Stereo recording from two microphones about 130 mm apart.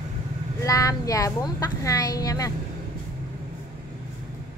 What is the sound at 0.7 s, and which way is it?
Speech, 25° left (ahead or behind).